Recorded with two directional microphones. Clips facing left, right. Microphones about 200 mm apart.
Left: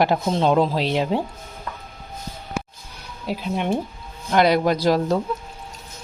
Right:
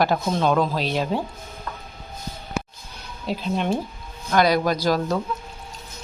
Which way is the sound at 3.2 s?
10° left (ahead or behind).